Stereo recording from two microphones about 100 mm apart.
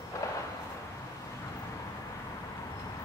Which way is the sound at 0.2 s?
30° left (ahead or behind).